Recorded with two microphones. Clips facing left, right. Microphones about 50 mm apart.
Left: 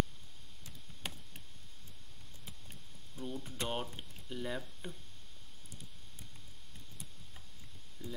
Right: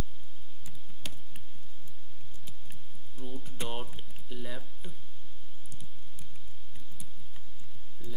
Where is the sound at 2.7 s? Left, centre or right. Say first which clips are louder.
Even; centre.